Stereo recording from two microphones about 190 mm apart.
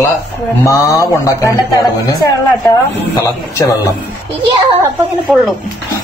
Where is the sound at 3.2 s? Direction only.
15° left (ahead or behind).